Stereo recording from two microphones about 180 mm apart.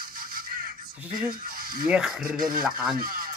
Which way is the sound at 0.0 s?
55° right (ahead or behind).